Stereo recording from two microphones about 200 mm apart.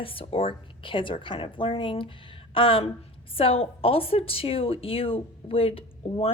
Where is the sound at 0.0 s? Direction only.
25° left (ahead or behind).